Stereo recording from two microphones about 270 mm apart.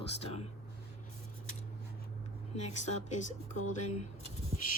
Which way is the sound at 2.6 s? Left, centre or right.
Left.